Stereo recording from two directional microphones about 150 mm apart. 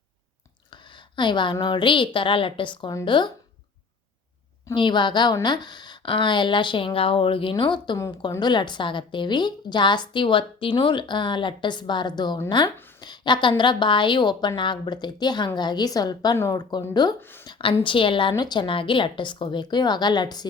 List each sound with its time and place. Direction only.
1.1 s a woman's voice: 30° left (ahead or behind)
4.7 s a woman's voice: 30° left (ahead or behind)
7.9 s a woman's voice: 20° left (ahead or behind)